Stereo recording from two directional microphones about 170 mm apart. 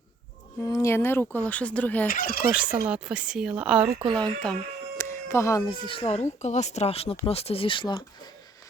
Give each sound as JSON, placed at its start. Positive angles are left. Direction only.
{"t": 0.6, "sound": "speech", "side_deg": 20}
{"t": 2.0, "sound": "speech", "side_deg": 60}
{"t": 2.5, "sound": "speech", "side_deg": -10}
{"t": 4.1, "sound": "speech", "side_deg": 5}
{"t": 4.9, "sound": "speech", "side_deg": 15}